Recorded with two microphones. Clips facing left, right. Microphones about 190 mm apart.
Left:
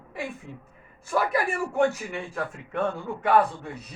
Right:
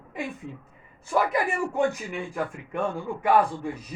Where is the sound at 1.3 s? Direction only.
15° right (ahead or behind).